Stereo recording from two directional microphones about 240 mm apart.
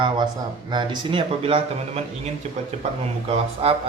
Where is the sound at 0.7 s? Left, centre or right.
Centre.